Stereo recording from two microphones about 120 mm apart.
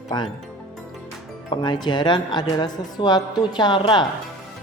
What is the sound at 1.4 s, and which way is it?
Speech, 40° left (ahead or behind).